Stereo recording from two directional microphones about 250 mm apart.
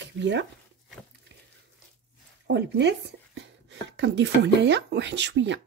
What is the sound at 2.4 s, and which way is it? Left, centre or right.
Speech, right.